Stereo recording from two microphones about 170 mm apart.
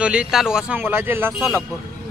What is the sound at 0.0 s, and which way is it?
Speech, 5° right (ahead or behind).